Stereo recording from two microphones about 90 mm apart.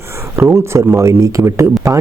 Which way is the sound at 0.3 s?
30° right (ahead or behind).